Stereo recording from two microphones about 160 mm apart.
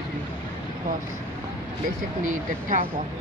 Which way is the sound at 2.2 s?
55° right (ahead or behind).